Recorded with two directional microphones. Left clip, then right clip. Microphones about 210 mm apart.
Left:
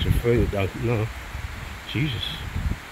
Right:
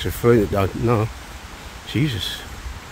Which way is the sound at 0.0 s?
30° right (ahead or behind).